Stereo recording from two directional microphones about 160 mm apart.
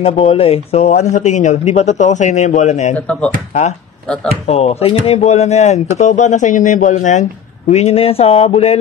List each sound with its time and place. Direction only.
0.0 s speech: 35° left (ahead or behind)
4.5 s speech: 40° left (ahead or behind)